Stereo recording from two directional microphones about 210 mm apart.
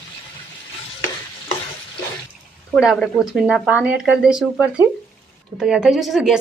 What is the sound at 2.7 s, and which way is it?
Speech, centre (ahead or behind).